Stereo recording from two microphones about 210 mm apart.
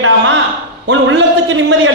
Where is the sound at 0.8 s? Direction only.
60° right (ahead or behind).